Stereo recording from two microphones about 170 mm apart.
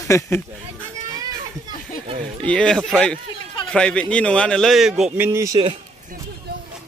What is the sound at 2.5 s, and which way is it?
A man's voice, 5° left (ahead or behind).